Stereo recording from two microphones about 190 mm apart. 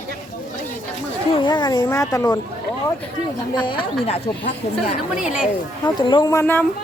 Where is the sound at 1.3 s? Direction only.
25° left (ahead or behind).